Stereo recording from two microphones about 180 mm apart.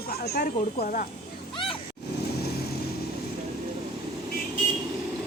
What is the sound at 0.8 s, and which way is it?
Speech, 45° left (ahead or behind).